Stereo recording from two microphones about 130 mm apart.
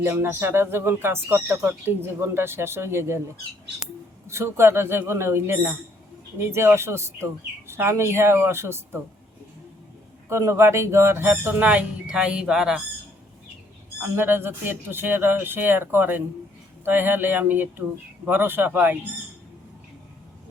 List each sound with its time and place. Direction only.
0.0 s speech: 20° right (ahead or behind)
4.3 s speech: 20° right (ahead or behind)
10.2 s speech: 20° right (ahead or behind); by 12.8 s 5° right (ahead or behind)
14.0 s speech: 15° right (ahead or behind)